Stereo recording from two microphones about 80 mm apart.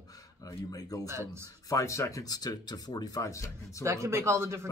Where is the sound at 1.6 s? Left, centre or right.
Left.